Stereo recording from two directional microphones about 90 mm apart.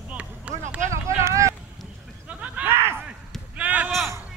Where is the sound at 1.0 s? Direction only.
35° right (ahead or behind).